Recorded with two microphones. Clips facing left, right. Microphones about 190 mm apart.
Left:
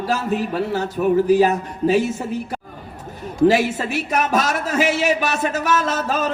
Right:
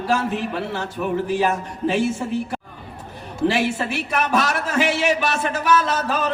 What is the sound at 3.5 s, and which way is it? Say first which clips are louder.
A man's voice: left 3 dB; 40° left (ahead or behind).